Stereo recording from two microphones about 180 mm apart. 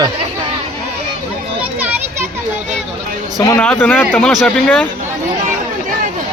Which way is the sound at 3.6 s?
10° left (ahead or behind).